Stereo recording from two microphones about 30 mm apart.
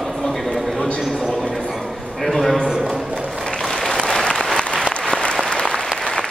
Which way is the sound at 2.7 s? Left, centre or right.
Centre.